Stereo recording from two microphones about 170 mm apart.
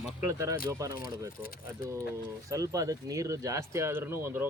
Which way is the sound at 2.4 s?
20° right (ahead or behind).